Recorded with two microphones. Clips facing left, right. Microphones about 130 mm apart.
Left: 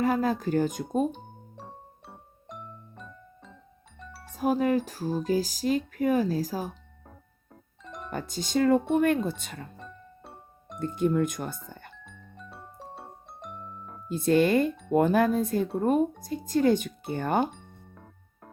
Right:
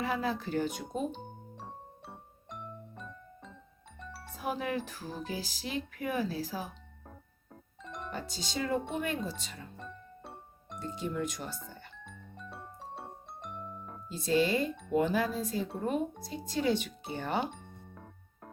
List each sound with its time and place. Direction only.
0.0 s speech: 45° left (ahead or behind)
1.1 s music: centre (ahead or behind)
4.4 s speech: 40° left (ahead or behind)
7.0 s music: centre (ahead or behind)
8.1 s speech: 50° left (ahead or behind)
9.7 s music: centre (ahead or behind)
10.8 s speech: 55° left (ahead or behind)
12.0 s music: centre (ahead or behind)
14.1 s speech: 55° left (ahead or behind)
17.5 s music: centre (ahead or behind)